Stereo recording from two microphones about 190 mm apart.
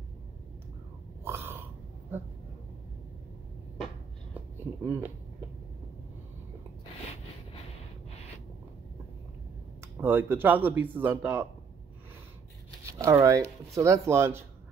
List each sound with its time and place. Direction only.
1.2 s throat clearing: 10° right (ahead or behind)
3.7 s a sound: centre (ahead or behind)
4.8 s speech: 10° right (ahead or behind)
9.8 s speech: 10° right (ahead or behind)
13.0 s speech: 15° right (ahead or behind)